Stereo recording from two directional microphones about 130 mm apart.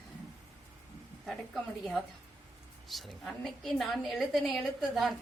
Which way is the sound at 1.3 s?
Centre (ahead or behind).